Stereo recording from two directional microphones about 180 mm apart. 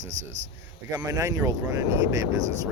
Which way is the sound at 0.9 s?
15° right (ahead or behind).